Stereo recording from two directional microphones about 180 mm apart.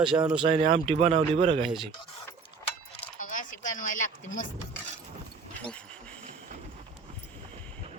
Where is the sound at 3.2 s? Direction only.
45° left (ahead or behind).